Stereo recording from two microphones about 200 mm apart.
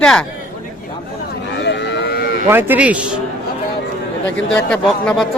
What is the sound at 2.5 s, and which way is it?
Speech, 10° right (ahead or behind).